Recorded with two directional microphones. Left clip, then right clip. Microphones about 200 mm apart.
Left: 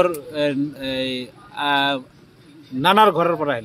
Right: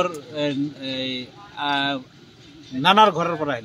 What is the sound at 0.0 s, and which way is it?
Speech, 50° left (ahead or behind).